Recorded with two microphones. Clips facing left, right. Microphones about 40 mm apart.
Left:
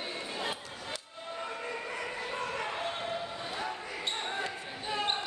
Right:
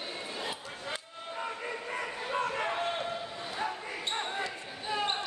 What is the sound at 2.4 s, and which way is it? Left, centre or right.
Basketball bounce, centre.